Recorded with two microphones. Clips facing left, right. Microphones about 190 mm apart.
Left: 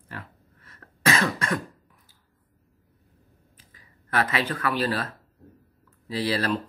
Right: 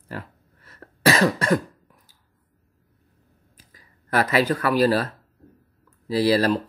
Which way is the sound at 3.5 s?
40° right (ahead or behind).